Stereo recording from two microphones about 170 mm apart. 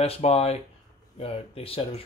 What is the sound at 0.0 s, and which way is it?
Speech, 35° left (ahead or behind).